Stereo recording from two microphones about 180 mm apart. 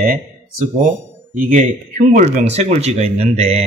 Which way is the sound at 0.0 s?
50° right (ahead or behind).